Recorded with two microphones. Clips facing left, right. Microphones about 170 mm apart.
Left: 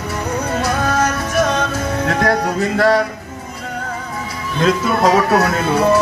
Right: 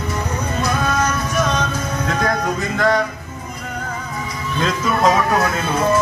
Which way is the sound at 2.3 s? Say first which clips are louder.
Left 4 dB; 35° left (ahead or behind).